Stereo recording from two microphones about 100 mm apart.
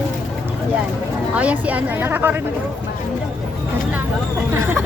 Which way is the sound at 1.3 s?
15° right (ahead or behind).